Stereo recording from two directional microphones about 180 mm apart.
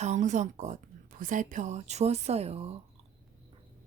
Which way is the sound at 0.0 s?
40° right (ahead or behind).